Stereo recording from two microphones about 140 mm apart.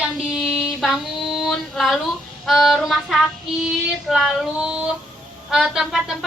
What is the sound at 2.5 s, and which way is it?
A woman's voice, centre (ahead or behind).